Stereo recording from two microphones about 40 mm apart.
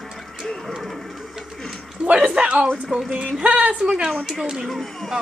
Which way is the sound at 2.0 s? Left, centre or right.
Right.